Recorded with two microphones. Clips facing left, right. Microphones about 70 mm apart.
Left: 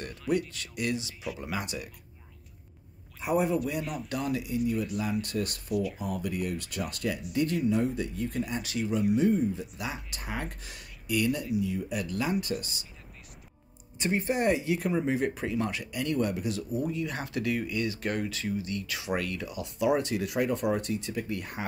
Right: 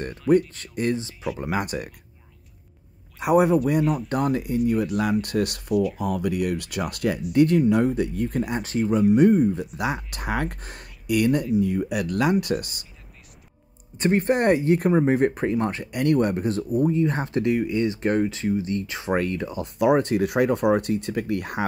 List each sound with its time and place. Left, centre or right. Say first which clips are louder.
0.5 s speech: right 7 dB; right
1.5 s speech: right 9 dB; right
3.2 s speech: right 9 dB; right
3.8 s speech: right 12 dB; centre
4.1 s speech: right 8 dB; right
4.6 s speech: right 7 dB; right
8.6 s speech: right 8 dB; right
8.9 s speech: right 8 dB; right
13.9 s speech: right 8 dB; right
15.9 s speech: right 10 dB; right
19.8 s speech: right 7 dB; right